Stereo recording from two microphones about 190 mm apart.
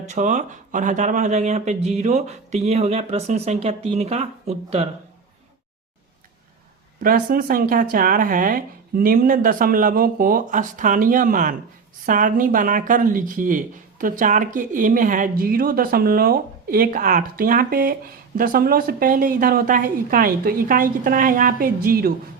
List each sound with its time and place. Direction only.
0.1 s speech: 40° right (ahead or behind)
7.0 s speech: 50° right (ahead or behind)